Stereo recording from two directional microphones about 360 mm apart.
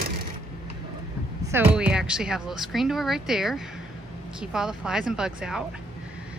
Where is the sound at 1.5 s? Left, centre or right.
Centre.